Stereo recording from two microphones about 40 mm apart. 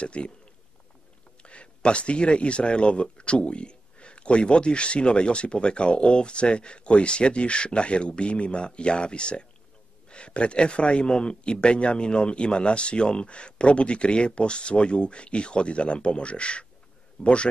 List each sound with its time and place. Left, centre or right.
0.0 s speech: left
1.4 s speech: left